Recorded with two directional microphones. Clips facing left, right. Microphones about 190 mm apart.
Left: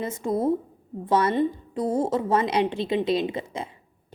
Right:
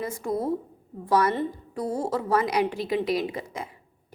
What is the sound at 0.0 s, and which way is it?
A woman's voice, 20° left (ahead or behind).